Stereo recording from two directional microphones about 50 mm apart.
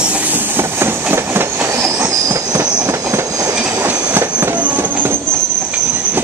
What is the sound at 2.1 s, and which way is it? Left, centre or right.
Train, right.